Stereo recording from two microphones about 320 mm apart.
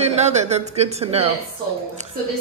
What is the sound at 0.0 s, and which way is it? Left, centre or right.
Speech, centre.